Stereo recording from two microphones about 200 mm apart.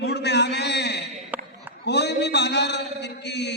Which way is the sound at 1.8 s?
55° left (ahead or behind).